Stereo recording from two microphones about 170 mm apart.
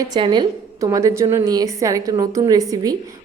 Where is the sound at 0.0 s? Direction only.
25° right (ahead or behind).